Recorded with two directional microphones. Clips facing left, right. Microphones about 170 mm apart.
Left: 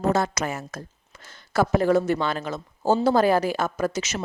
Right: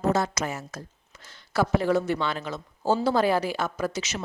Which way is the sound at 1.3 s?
45° left (ahead or behind).